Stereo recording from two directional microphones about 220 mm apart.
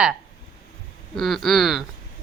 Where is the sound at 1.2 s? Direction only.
Centre (ahead or behind).